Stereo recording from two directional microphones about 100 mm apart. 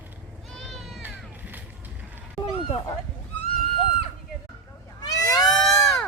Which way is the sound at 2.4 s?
70° left (ahead or behind).